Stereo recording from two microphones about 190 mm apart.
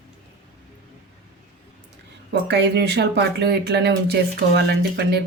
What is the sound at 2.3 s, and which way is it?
Speech, 60° right (ahead or behind).